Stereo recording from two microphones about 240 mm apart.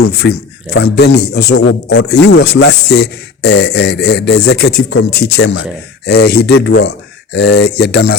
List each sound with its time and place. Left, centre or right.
0.1 s a man's voice: left